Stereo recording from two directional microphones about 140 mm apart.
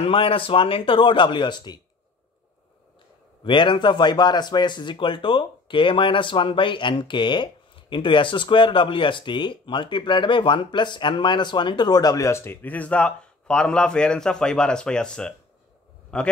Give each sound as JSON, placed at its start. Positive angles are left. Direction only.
{"t": 0.0, "sound": "speech", "side_deg": 40}
{"t": 3.4, "sound": "a man's voice", "side_deg": 35}